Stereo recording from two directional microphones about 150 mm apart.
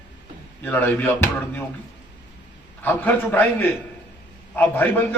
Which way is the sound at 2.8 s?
10° left (ahead or behind).